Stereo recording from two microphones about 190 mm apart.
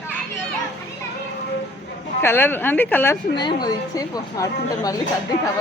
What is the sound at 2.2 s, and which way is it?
Speech, 10° left (ahead or behind).